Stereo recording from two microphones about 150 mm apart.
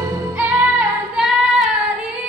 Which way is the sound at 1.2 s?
5° right (ahead or behind).